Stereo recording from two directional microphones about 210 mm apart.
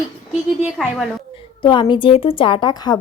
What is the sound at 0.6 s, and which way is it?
Speech, centre (ahead or behind).